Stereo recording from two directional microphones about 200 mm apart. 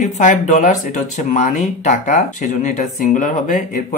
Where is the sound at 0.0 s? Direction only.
40° left (ahead or behind).